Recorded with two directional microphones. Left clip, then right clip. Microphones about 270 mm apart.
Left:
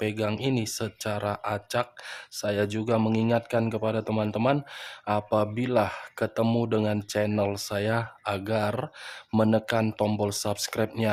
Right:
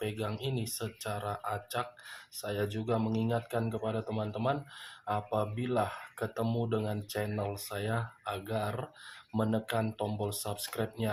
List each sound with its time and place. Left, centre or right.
0.0 s speech: left